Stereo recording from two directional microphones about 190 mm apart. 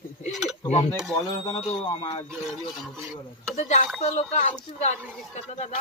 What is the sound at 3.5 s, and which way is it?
Speech, 40° left (ahead or behind).